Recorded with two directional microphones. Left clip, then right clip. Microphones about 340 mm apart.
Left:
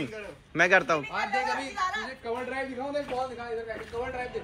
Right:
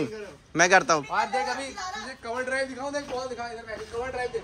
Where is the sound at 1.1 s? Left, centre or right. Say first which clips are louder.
Right 2 dB; right.